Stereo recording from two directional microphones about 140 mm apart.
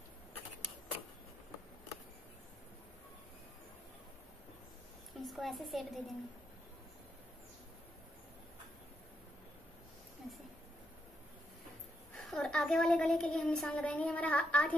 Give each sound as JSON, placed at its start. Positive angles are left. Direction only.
{"t": 5.2, "sound": "a woman's voice", "side_deg": 0}
{"t": 12.3, "sound": "a woman's voice", "side_deg": 5}